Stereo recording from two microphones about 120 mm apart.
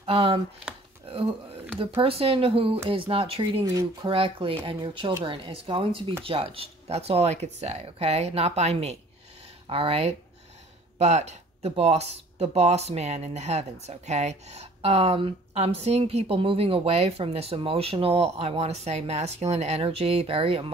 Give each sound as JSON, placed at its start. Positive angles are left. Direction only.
{"t": 0.0, "sound": "speech", "side_deg": -55}
{"t": 1.0, "sound": "a sound", "side_deg": -55}
{"t": 2.0, "sound": "speech", "side_deg": -50}
{"t": 9.7, "sound": "speech", "side_deg": -50}
{"t": 11.0, "sound": "speech", "side_deg": -70}